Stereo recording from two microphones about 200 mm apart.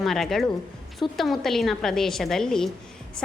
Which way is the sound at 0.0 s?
Centre (ahead or behind).